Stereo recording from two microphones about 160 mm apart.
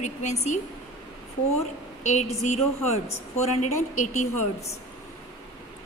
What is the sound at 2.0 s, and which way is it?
Speech, 45° left (ahead or behind).